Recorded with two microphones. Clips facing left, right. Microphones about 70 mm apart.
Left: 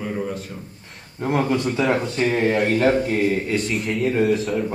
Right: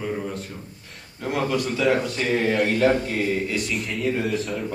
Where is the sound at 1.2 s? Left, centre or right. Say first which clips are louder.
Left 3 dB; left.